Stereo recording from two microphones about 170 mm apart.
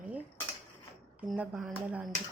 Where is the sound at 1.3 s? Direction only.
Centre (ahead or behind).